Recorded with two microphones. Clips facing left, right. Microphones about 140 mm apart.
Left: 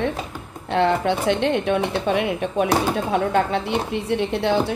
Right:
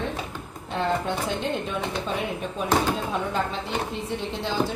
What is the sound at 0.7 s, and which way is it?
Speech, 80° left.